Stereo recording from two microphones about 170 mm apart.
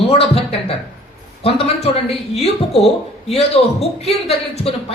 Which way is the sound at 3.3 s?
40° left (ahead or behind).